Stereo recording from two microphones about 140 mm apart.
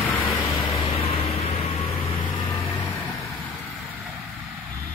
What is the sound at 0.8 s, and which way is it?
Vehicle, 45° left (ahead or behind).